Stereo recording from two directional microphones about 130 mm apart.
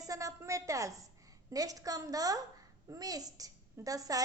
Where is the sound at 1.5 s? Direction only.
25° right (ahead or behind).